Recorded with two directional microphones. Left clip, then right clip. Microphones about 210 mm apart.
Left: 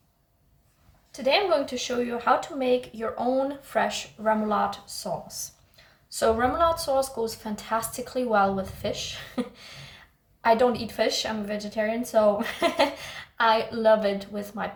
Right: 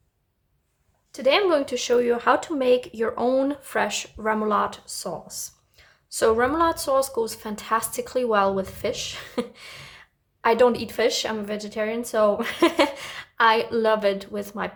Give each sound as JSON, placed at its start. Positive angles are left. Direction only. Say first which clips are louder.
{"t": 1.1, "sound": "a woman's voice", "louder": "right 3 dB", "side_deg": -40}